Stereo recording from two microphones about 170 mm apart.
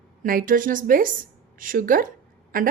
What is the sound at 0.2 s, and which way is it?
A woman's voice, 55° right (ahead or behind).